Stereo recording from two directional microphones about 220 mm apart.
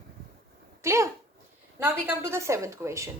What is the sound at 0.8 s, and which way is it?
A woman's voice, 15° right (ahead or behind).